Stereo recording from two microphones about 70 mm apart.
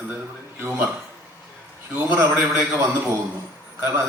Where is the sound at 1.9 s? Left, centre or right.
Right.